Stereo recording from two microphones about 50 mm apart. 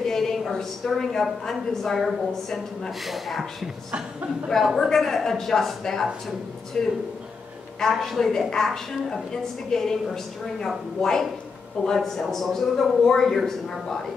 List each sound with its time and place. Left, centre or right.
0.0 s a woman's voice: centre
7.9 s a woman's voice: centre